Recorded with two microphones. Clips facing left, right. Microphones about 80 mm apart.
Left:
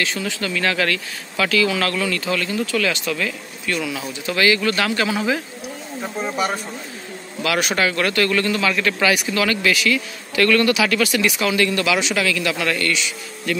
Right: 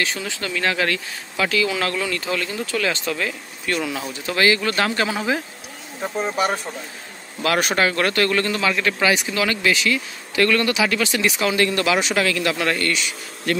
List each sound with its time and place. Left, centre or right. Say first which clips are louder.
0.0 s speech: left 2 dB; right
7.4 s speech: right 1 dB; right